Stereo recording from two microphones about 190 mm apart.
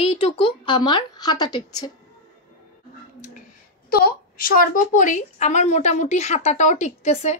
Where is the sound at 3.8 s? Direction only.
50° left (ahead or behind); by 7.4 s 35° left (ahead or behind).